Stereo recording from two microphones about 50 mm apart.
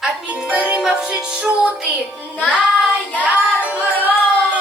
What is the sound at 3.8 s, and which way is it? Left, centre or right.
Music, left.